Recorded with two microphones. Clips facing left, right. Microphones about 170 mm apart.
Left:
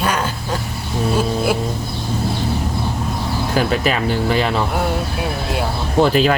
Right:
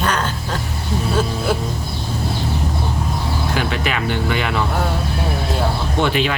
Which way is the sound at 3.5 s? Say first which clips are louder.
Left 6 dB; 40° left (ahead or behind).